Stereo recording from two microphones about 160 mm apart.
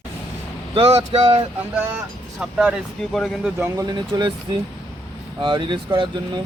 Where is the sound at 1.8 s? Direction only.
10° right (ahead or behind).